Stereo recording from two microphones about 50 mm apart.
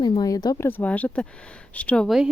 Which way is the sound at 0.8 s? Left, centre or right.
Left.